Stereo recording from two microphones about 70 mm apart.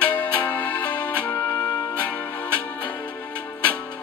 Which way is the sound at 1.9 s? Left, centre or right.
Left.